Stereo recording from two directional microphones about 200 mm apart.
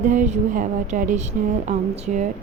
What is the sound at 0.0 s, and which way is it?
Speech, 40° right (ahead or behind).